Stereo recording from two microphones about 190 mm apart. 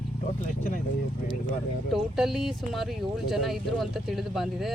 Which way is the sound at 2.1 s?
Centre (ahead or behind).